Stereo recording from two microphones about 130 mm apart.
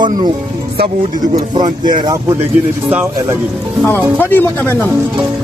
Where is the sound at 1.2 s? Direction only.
35° right (ahead or behind).